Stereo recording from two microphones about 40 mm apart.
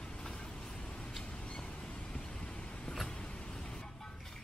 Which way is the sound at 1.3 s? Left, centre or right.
Left.